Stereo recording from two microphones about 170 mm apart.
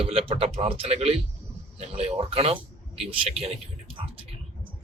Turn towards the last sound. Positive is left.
turn(degrees=-35)  # may be behind; listen again after turning